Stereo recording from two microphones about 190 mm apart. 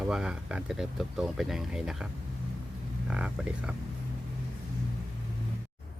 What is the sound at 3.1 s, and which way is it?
Speech, 5° right (ahead or behind).